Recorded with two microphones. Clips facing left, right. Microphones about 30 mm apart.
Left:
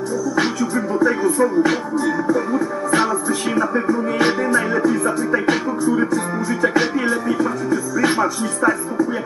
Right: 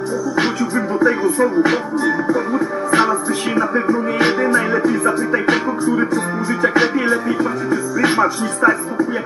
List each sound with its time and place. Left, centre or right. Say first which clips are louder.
0.4 s music: right 2 dB; right